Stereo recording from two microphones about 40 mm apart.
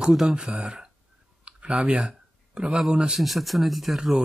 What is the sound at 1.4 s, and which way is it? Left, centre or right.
Clicking, right.